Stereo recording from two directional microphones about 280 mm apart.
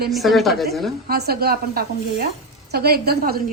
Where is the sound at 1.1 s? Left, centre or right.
Right.